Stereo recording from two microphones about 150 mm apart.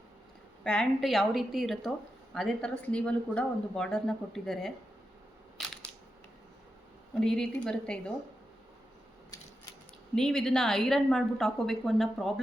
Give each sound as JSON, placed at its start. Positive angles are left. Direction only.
{"t": 0.6, "sound": "speech", "side_deg": 5}
{"t": 5.6, "sound": "crushing", "side_deg": 0}
{"t": 7.2, "sound": "speech", "side_deg": 5}
{"t": 10.2, "sound": "speech", "side_deg": 5}